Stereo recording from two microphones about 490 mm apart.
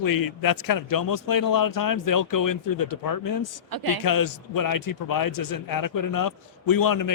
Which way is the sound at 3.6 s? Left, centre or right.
Right.